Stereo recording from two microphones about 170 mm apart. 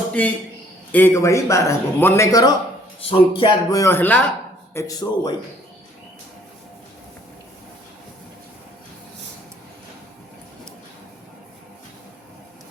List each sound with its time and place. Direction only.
0.1 s a man's voice: 10° left (ahead or behind)
3.0 s speech: 35° left (ahead or behind)
3.8 s a man's voice: 15° left (ahead or behind)